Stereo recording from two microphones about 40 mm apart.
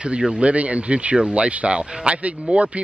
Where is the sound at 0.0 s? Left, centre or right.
Right.